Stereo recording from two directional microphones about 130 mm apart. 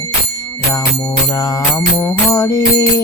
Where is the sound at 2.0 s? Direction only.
25° left (ahead or behind).